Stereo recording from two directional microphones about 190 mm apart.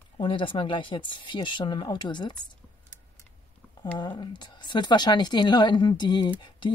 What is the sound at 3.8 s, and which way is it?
Speech, 25° left (ahead or behind).